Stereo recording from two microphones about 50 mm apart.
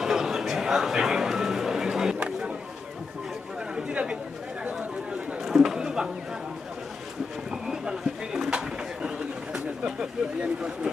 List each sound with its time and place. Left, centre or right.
0.0 s a sound: centre
3.8 s chatter: centre
5.4 s chatter: centre
7.5 s pigeon: centre